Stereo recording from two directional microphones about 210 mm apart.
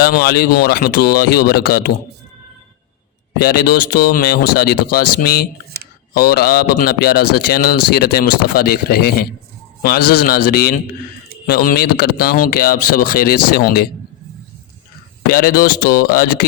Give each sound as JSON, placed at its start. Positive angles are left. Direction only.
{"t": 0.0, "sound": "speech", "side_deg": 45}
{"t": 3.3, "sound": "speech", "side_deg": 45}
{"t": 15.3, "sound": "speech", "side_deg": 45}